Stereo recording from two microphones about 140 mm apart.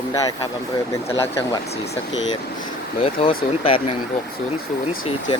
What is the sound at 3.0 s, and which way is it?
Speech, 45° left (ahead or behind).